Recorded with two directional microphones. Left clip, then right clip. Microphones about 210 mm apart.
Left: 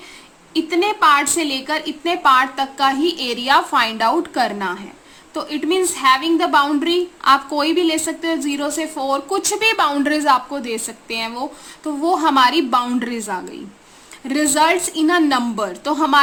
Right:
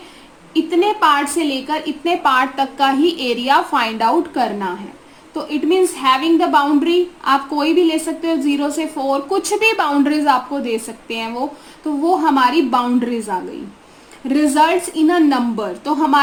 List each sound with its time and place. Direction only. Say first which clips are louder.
0.5 s a woman's voice: right 2 dB; 20° left (ahead or behind)